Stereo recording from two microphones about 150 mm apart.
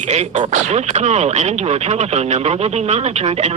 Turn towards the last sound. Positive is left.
turn(degrees=-45)  # may be behind; listen again after turning